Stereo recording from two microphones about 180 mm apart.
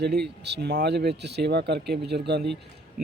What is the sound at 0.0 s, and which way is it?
A man's voice, 65° right (ahead or behind).